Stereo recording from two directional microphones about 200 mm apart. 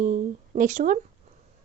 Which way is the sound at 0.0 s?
40° right (ahead or behind).